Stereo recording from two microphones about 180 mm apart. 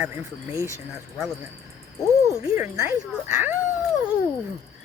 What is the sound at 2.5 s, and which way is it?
Speech, 10° right (ahead or behind).